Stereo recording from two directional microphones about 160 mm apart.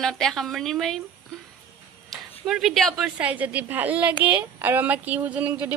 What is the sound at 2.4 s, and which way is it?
Speech, centre (ahead or behind).